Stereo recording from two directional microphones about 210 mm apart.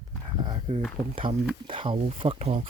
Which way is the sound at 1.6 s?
25° right (ahead or behind).